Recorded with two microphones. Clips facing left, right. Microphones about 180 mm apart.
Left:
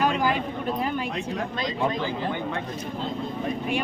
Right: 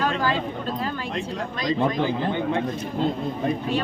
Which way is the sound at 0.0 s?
15° left (ahead or behind).